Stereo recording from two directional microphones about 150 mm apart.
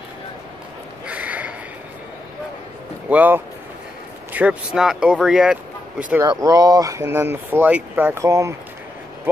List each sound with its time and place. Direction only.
1.0 s snort: 10° right (ahead or behind)
3.1 s speech: 10° right (ahead or behind)
6.2 s speech: 25° right (ahead or behind)